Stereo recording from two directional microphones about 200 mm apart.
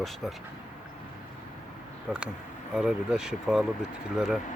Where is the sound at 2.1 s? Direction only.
5° right (ahead or behind).